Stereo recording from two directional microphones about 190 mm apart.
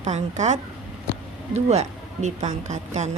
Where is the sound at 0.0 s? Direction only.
40° right (ahead or behind).